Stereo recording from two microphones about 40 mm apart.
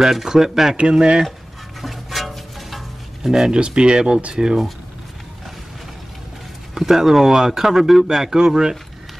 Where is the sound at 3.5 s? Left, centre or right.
Right.